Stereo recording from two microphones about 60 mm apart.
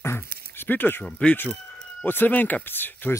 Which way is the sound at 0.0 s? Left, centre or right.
Left.